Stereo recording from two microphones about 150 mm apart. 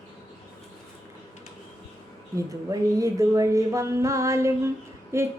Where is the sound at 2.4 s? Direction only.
20° right (ahead or behind).